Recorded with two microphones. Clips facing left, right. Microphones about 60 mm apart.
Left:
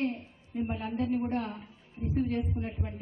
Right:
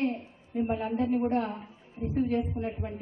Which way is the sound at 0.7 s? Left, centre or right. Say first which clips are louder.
Right 3 dB; right.